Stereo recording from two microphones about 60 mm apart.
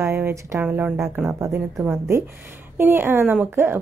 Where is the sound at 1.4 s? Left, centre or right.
Right.